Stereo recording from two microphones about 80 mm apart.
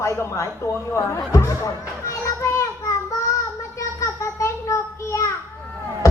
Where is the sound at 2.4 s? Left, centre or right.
Left.